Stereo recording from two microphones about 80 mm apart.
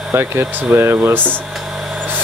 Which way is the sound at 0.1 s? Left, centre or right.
Right.